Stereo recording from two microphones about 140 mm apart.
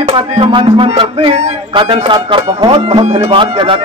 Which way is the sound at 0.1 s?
35° right (ahead or behind).